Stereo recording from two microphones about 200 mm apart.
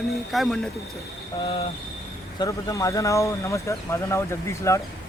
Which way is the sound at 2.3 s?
20° left (ahead or behind).